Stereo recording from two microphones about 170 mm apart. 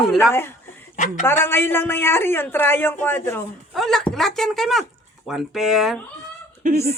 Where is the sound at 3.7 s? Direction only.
Centre (ahead or behind).